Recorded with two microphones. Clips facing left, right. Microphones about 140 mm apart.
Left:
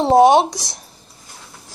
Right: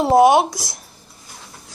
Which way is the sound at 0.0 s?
25° left (ahead or behind).